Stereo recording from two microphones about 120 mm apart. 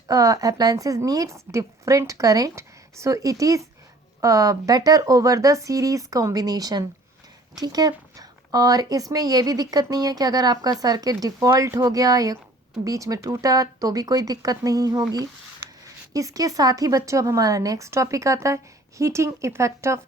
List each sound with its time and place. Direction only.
0.1 s speech: 30° right (ahead or behind)